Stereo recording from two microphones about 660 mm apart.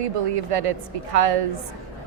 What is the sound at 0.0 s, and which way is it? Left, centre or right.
A woman's voice, right.